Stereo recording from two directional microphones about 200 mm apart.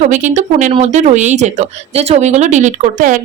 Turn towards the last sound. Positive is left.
turn(degrees=-40)  # may be behind; listen again after turning